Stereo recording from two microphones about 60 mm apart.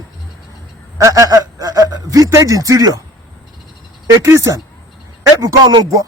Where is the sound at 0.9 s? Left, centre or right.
Right.